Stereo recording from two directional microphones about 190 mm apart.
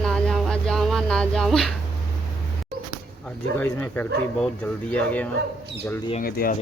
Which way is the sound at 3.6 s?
10° left (ahead or behind).